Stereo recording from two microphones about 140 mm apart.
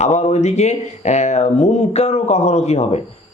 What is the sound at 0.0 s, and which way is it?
Speech, 55° left (ahead or behind).